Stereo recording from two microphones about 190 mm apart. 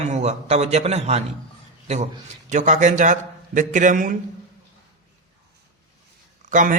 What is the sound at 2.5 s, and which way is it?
Speech, 40° right (ahead or behind).